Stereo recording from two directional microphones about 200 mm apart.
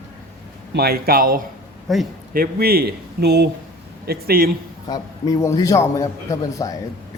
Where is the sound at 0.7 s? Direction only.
50° right (ahead or behind).